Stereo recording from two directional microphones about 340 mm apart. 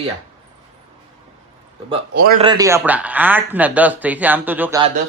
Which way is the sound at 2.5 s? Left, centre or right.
Centre.